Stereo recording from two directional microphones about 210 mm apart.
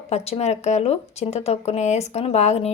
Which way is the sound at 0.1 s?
30° left (ahead or behind).